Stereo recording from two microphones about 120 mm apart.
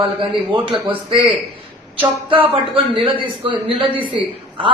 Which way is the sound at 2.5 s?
50° right (ahead or behind).